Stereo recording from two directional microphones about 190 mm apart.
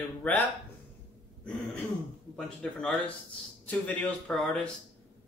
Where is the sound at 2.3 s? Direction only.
5° left (ahead or behind).